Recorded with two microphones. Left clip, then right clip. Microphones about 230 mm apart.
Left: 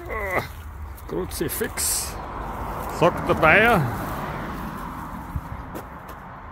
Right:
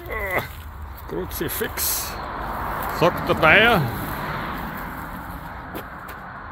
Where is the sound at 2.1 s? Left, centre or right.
Right.